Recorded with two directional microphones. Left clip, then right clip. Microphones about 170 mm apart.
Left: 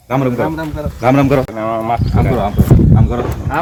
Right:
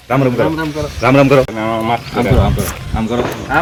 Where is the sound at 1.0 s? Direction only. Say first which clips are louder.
Right 3 dB; 90° left.